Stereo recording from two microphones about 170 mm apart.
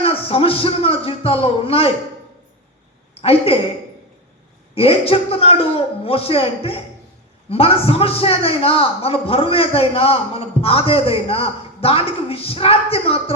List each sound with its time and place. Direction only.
0.0 s a man's voice: 35° left (ahead or behind)
3.2 s a woman's voice: 35° left (ahead or behind)
4.7 s a man's voice: 35° left (ahead or behind)